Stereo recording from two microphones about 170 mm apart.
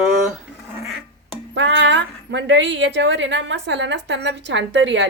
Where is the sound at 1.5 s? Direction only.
90° right.